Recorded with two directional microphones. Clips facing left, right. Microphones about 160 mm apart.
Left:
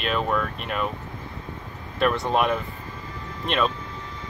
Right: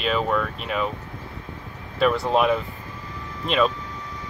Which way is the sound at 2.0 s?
Centre (ahead or behind).